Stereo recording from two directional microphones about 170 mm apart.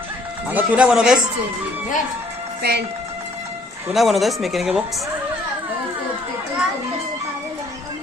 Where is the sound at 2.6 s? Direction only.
70° right (ahead or behind).